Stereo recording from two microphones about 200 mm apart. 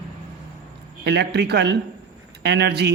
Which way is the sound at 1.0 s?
55° right (ahead or behind).